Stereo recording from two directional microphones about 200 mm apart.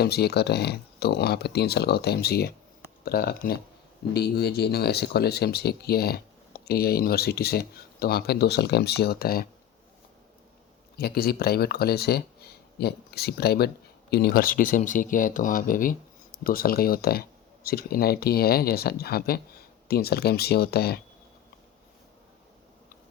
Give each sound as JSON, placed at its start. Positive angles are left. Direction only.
{"t": 0.0, "sound": "speech", "side_deg": 55}
{"t": 10.9, "sound": "speech", "side_deg": 50}